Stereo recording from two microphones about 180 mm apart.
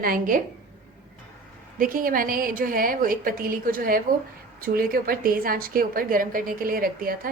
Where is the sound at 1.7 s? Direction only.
50° right (ahead or behind).